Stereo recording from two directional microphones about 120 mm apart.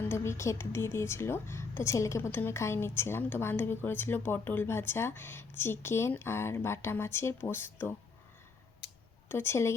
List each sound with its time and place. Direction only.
0.1 s speech: 25° left (ahead or behind)
9.3 s speech: 20° left (ahead or behind)